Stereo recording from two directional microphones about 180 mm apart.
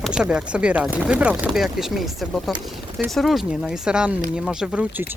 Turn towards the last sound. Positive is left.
turn(degrees=-10)  # may be behind; listen again after turning